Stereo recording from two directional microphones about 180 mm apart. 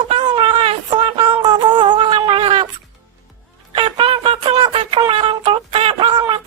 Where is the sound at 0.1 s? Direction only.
30° right (ahead or behind).